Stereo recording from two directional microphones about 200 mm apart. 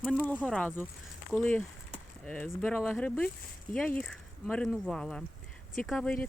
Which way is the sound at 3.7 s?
45° left (ahead or behind).